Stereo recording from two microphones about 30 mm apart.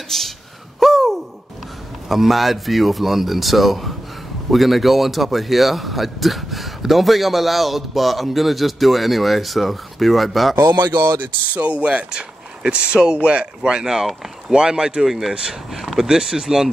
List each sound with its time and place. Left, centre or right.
0.1 s speech: centre
0.7 s hoot: centre
2.0 s a man's voice: centre
11.5 s speech: right
15.0 s speech: centre
16.0 s speech: centre